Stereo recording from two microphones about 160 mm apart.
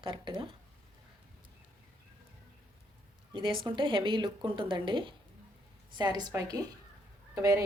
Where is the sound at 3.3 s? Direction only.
30° right (ahead or behind).